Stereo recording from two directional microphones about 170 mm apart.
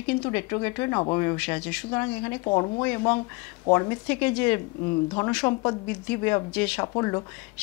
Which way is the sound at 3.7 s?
20° left (ahead or behind).